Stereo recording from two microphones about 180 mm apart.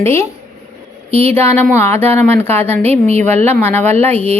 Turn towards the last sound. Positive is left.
turn(degrees=10)  # may be behind; listen again after turning